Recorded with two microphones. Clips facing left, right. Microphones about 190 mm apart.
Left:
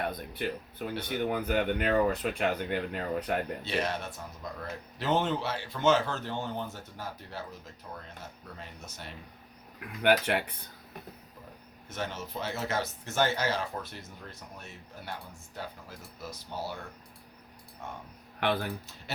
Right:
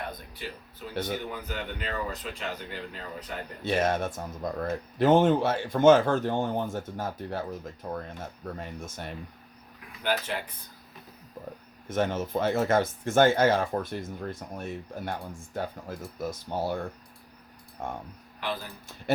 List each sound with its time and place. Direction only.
0.3 s speech: 55° left (ahead or behind)
3.6 s speech: 50° right (ahead or behind)
10.0 s speech: 65° left (ahead or behind)
11.9 s speech: 50° right (ahead or behind)
17.8 s speech: 50° right (ahead or behind)
18.3 s speech: 65° left (ahead or behind)